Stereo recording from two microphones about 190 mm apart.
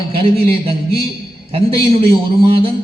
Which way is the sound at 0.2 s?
30° right (ahead or behind).